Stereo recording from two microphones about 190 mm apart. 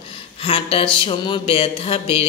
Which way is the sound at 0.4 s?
30° left (ahead or behind).